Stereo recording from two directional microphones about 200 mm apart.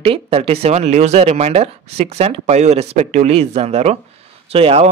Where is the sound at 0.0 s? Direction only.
30° right (ahead or behind).